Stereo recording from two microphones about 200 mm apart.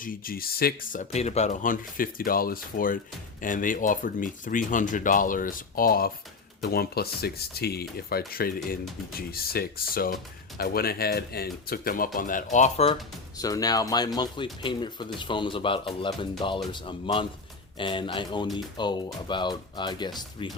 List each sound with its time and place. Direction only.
0.0 s speech: 45° left (ahead or behind)
13.4 s speech: 20° left (ahead or behind)